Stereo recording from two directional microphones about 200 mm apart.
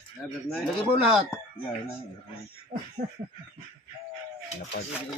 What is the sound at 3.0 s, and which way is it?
Snicker, 45° right (ahead or behind).